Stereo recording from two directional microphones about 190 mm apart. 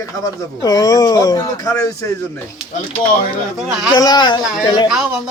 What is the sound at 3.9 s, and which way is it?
Speech, 20° left (ahead or behind).